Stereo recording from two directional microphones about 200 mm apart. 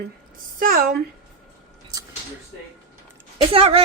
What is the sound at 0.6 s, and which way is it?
Speech, 45° right (ahead or behind).